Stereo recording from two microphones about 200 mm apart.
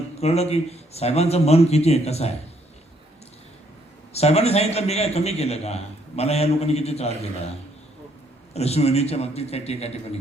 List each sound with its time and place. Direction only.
0.2 s a man's voice: 30° left (ahead or behind)
4.1 s a man's voice: 30° left (ahead or behind)
8.5 s a man's voice: 30° left (ahead or behind)